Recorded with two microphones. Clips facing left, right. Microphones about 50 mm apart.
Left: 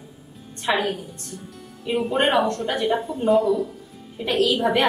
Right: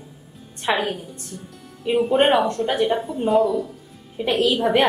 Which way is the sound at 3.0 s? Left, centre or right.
Centre.